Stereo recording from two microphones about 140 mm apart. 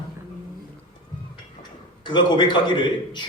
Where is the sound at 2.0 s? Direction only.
35° left (ahead or behind).